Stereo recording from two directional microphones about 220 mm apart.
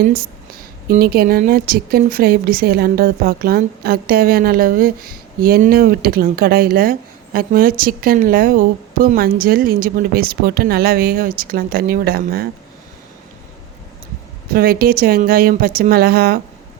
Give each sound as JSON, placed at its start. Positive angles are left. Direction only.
{"t": 0.9, "sound": "a woman's voice", "side_deg": -40}
{"t": 14.5, "sound": "speech", "side_deg": -40}